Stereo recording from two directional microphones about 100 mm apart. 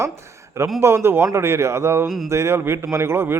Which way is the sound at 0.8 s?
25° right (ahead or behind).